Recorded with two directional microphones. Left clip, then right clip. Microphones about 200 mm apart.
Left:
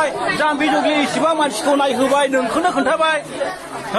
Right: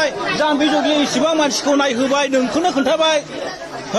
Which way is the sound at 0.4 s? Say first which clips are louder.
Right 1 dB; 40° right (ahead or behind).